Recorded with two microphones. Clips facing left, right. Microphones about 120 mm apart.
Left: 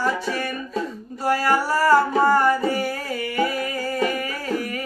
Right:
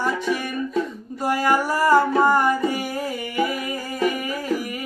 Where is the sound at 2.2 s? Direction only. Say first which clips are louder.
Left 1 dB; 15° right (ahead or behind).